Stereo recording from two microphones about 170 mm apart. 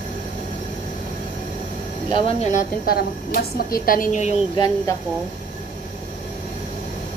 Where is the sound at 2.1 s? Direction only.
45° left (ahead or behind).